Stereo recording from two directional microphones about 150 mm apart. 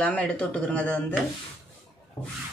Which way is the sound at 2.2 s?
30° left (ahead or behind).